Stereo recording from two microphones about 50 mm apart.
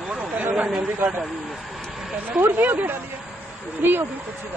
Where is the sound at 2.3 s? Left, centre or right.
Right.